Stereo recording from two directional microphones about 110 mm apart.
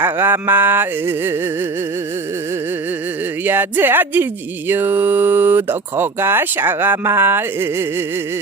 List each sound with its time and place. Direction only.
0.0 s speech: 20° right (ahead or behind)
3.4 s speech: 20° right (ahead or behind)